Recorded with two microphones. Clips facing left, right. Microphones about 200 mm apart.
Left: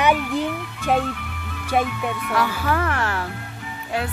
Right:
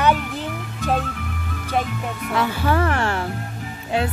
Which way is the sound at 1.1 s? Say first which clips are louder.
Right 2 dB; 45° right (ahead or behind).